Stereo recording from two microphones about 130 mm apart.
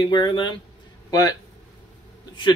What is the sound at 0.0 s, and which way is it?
Speech, 35° left (ahead or behind).